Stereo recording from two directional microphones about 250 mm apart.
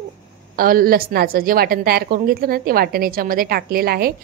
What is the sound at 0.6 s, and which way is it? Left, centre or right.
A woman's voice, right.